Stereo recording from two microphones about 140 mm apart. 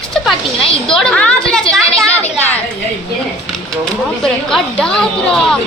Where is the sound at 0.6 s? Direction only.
40° left (ahead or behind).